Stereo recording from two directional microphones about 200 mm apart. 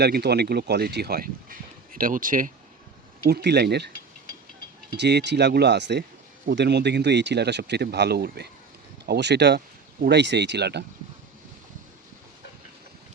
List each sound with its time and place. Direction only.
0.0 s speech: 55° right (ahead or behind)
3.2 s speech: 55° right (ahead or behind)
4.9 s speech: 60° right (ahead or behind)